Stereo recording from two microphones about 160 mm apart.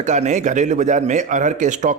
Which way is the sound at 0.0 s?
50° right (ahead or behind).